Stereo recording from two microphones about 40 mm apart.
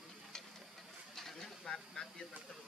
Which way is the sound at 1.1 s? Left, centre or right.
Centre.